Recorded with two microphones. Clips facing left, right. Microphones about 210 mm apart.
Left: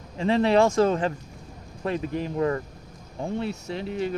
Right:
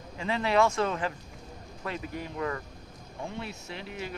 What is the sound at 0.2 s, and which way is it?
Speech, 35° left (ahead or behind).